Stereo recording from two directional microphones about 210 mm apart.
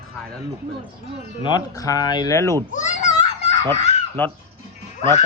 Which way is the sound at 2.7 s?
35° left (ahead or behind).